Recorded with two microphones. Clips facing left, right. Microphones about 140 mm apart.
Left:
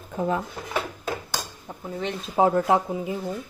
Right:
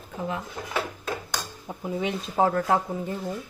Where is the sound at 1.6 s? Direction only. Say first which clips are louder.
Right 3 dB; 10° right (ahead or behind).